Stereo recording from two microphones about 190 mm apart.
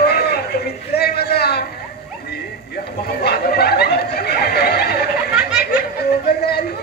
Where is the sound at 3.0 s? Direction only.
55° left (ahead or behind).